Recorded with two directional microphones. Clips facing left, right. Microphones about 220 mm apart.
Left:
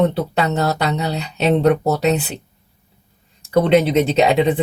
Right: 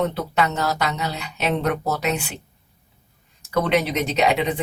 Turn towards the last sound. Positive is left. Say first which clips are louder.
# left 6 dB
turn(degrees=35)  # may be behind; listen again after turning